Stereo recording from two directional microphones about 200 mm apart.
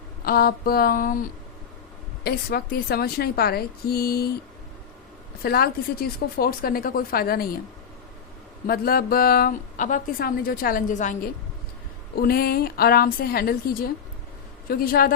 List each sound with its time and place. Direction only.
0.3 s a woman's voice: 50° left (ahead or behind)
5.4 s a woman's voice: 50° left (ahead or behind)
8.6 s a woman's voice: 50° left (ahead or behind)
12.1 s a woman's voice: 50° left (ahead or behind)